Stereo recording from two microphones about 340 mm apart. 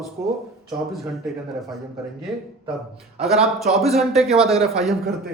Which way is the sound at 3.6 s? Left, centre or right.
Centre.